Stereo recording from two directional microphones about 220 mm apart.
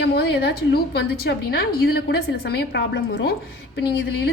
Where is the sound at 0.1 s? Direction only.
50° left (ahead or behind).